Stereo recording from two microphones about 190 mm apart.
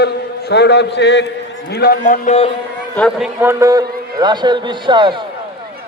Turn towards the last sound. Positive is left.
turn(degrees=-25)  # may be behind; listen again after turning